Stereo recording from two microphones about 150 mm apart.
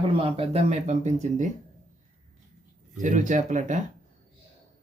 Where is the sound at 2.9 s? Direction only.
55° right (ahead or behind).